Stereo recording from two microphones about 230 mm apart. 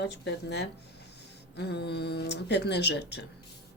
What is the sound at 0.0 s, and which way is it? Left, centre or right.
A woman's voice, left.